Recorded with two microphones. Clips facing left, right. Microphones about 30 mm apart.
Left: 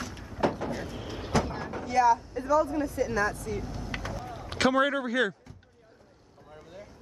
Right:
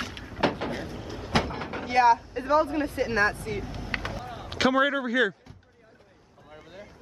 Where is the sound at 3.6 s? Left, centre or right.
Right.